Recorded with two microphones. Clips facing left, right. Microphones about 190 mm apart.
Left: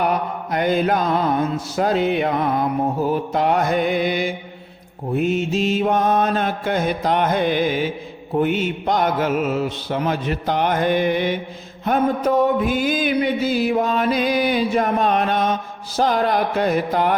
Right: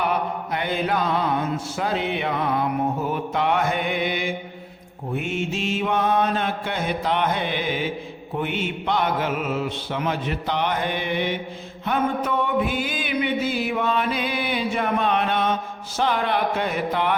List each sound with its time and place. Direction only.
0.0 s mantra: 40° left (ahead or behind)